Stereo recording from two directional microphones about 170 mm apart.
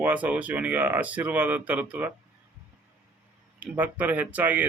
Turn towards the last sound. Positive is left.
turn(degrees=-10)  # may be behind; listen again after turning